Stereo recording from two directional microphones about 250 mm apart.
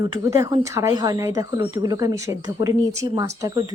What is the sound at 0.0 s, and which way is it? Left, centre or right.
Speech, centre.